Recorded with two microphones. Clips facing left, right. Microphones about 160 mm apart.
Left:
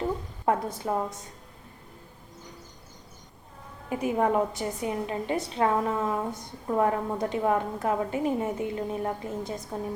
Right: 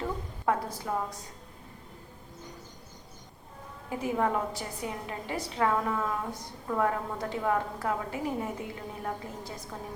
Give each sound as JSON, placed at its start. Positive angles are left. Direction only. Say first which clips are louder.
{"t": 0.4, "sound": "a woman's voice", "louder": "left 3 dB", "side_deg": 20}
{"t": 3.8, "sound": "a woman's voice", "louder": "left 4 dB", "side_deg": 20}